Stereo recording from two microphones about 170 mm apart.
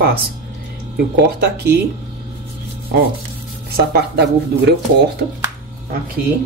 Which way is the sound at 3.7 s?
70° right (ahead or behind).